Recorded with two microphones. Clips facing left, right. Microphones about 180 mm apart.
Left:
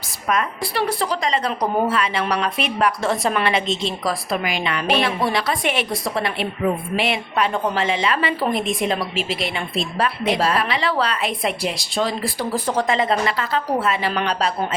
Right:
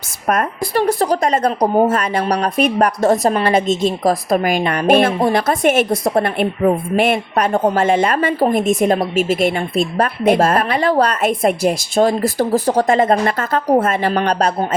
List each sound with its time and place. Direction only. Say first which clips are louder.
0.3 s a woman's voice: right 4 dB; 45° right (ahead or behind)